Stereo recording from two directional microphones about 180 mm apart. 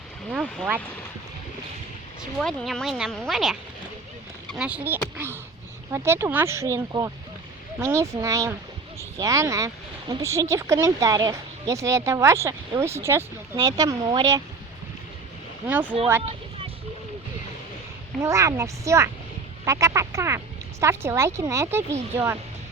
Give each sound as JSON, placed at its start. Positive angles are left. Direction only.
{"t": 0.3, "sound": "speech", "side_deg": 0}
{"t": 2.4, "sound": "speech", "side_deg": 0}
{"t": 5.1, "sound": "a sound", "side_deg": -15}
{"t": 5.9, "sound": "speech", "side_deg": -15}
{"t": 15.6, "sound": "speech", "side_deg": -10}
{"t": 18.2, "sound": "speech", "side_deg": -15}